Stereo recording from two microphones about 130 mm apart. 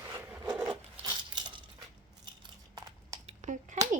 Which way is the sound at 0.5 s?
5° right (ahead or behind).